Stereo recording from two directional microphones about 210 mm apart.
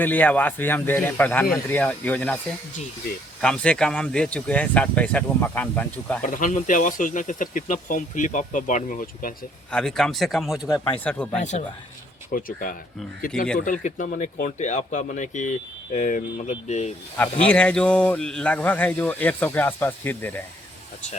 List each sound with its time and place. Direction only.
0.0 s speech: 10° left (ahead or behind)
3.4 s speech: 5° left (ahead or behind)
6.2 s speech: 40° left (ahead or behind)
9.7 s speech: centre (ahead or behind)
12.3 s speech: 40° left (ahead or behind)
17.4 s speech: 5° left (ahead or behind)